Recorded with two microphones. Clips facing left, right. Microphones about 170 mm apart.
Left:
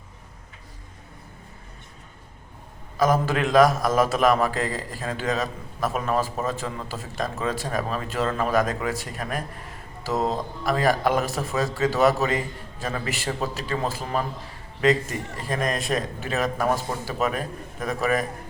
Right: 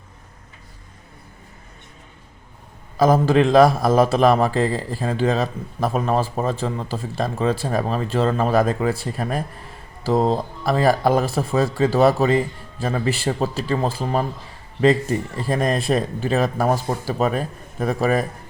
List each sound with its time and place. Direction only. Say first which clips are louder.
3.0 s a man's voice: right 6 dB; 30° right (ahead or behind)
15.4 s speech: right 4 dB; 30° right (ahead or behind)